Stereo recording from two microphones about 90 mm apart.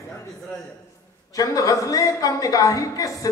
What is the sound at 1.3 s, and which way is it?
A woman's voice, 40° left (ahead or behind).